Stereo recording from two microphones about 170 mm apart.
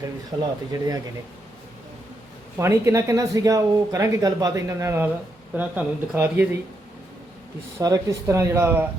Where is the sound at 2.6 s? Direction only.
15° right (ahead or behind).